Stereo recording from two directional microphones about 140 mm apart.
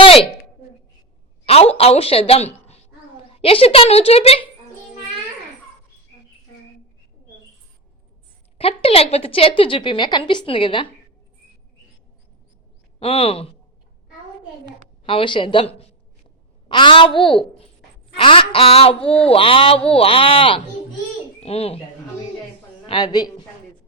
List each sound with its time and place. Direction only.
0.0 s a sound: 40° left (ahead or behind)
1.7 s a woman's voice: 45° left (ahead or behind)
8.5 s speech: 45° left (ahead or behind)
13.0 s speech: 40° left (ahead or behind)
15.0 s a woman's voice: 35° left (ahead or behind)
22.9 s speech: 30° left (ahead or behind)